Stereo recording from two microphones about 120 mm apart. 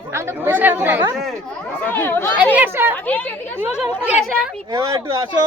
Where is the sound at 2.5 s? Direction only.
15° right (ahead or behind).